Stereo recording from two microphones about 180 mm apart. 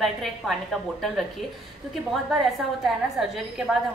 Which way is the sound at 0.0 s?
Centre (ahead or behind).